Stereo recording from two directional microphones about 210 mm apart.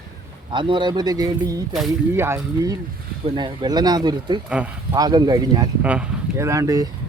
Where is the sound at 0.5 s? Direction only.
20° right (ahead or behind).